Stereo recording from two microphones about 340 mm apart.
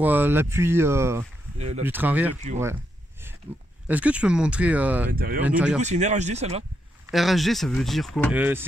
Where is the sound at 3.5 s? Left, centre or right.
Centre.